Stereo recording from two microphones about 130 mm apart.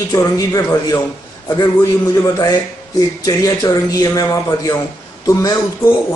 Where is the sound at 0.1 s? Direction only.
25° left (ahead or behind).